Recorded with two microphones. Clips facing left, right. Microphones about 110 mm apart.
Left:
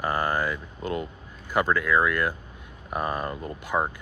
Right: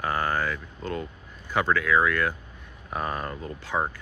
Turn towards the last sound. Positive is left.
turn(degrees=10)  # may be behind; listen again after turning